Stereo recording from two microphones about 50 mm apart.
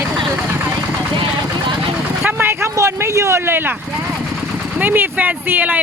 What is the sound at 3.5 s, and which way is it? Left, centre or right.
Speech, right.